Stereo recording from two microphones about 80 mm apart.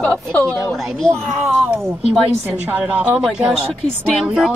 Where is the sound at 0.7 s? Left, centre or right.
Centre.